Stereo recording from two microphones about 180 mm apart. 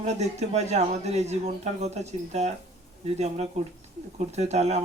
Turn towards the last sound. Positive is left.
turn(degrees=-35)  # may be behind; listen again after turning